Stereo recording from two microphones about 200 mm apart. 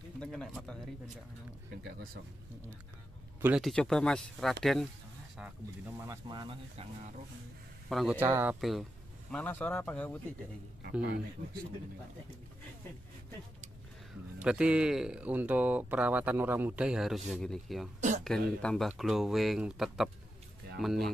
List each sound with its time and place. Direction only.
0.2 s bird: 5° left (ahead or behind)
3.3 s speech: 10° right (ahead or behind)
3.6 s speech: centre (ahead or behind)
5.9 s speech: 20° right (ahead or behind)
7.9 s speech: 5° right (ahead or behind)
8.5 s speech: centre (ahead or behind)
10.9 s speech: 5° right (ahead or behind)
14.4 s speech: 5° right (ahead or behind)